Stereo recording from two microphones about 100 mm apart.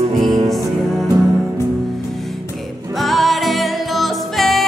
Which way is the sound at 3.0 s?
Centre (ahead or behind).